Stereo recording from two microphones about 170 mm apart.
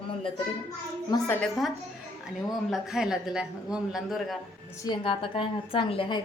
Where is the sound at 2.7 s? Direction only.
5° right (ahead or behind).